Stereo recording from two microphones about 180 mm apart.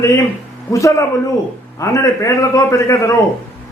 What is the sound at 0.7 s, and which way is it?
A man's voice, 15° left (ahead or behind).